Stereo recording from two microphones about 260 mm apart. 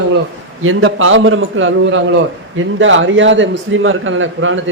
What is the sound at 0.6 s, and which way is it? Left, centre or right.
A man's voice, right.